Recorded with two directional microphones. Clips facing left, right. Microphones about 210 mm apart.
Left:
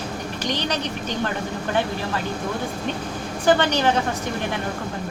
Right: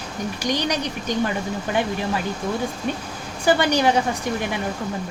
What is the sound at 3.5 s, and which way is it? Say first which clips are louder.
Speech: right 1 dB; 10° right (ahead or behind).